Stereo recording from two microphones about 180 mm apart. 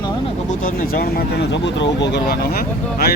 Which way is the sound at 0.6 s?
50° left (ahead or behind).